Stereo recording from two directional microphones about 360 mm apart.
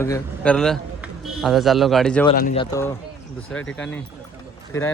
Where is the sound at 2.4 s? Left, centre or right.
Left.